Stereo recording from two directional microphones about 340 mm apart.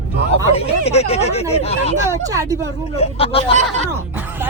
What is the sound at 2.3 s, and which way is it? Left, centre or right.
Speech, centre.